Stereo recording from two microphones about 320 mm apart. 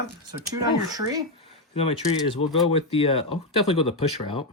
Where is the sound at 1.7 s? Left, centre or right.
Centre.